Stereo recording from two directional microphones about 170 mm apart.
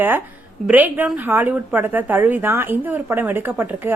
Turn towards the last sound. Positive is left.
turn(degrees=-10)  # may be behind; listen again after turning